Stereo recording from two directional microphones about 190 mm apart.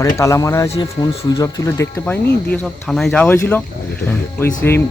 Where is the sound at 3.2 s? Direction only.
10° left (ahead or behind).